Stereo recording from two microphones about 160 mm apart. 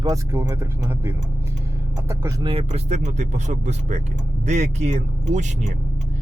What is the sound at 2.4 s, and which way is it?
Speech, 40° right (ahead or behind).